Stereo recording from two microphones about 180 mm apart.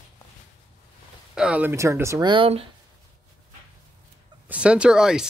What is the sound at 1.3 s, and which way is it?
Speech, 5° right (ahead or behind).